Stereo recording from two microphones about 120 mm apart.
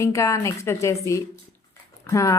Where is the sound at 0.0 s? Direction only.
25° left (ahead or behind).